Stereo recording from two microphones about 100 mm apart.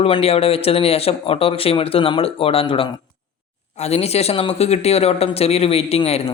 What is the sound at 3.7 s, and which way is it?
Speech, 90° left.